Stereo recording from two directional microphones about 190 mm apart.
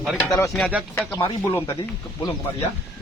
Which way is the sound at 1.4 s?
15° left (ahead or behind).